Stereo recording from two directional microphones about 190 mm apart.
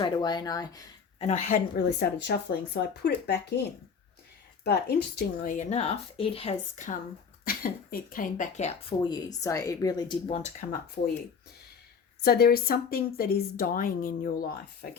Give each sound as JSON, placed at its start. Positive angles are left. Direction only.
{"t": 0.0, "sound": "speech", "side_deg": 20}
{"t": 1.2, "sound": "speech", "side_deg": 35}
{"t": 1.7, "sound": "speech", "side_deg": 60}
{"t": 4.6, "sound": "speech", "side_deg": 60}
{"t": 5.5, "sound": "speech", "side_deg": 35}
{"t": 7.4, "sound": "a woman's voice", "side_deg": 50}
{"t": 9.0, "sound": "speech", "side_deg": 20}
{"t": 12.2, "sound": "a woman's voice", "side_deg": 55}